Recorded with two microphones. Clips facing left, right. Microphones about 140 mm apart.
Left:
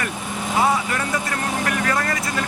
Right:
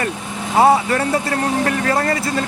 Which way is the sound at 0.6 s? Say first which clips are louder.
Right 8 dB; 40° right (ahead or behind).